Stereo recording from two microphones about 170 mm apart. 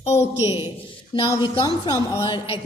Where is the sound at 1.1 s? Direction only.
25° left (ahead or behind).